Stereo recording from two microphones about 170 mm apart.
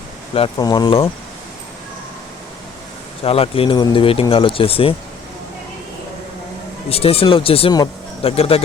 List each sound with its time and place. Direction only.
0.3 s speech: 30° left (ahead or behind)
3.2 s speech: 35° left (ahead or behind)
6.9 s speech: 35° left (ahead or behind)